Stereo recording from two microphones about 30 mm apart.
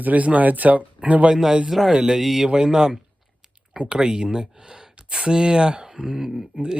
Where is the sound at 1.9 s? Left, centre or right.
Centre.